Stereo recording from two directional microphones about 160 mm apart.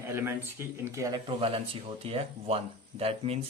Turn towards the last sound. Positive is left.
turn(degrees=-40)  # may be behind; listen again after turning